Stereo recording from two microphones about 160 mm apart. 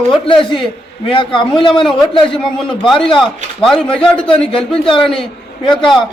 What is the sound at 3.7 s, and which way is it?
A man's voice, 5° left (ahead or behind).